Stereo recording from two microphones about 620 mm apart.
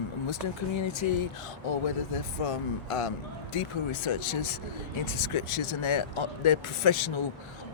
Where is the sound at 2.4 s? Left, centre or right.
Left.